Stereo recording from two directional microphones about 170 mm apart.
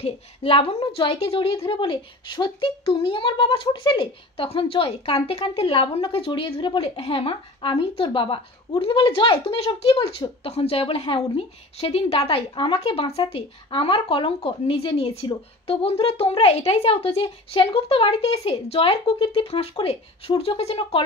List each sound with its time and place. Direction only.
0.0 s speech: 35° left (ahead or behind)